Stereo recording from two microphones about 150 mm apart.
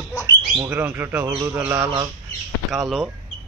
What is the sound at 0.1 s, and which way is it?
Bird, 15° left (ahead or behind).